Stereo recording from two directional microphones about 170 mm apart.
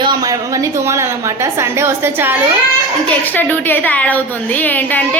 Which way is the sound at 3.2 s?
10° left (ahead or behind).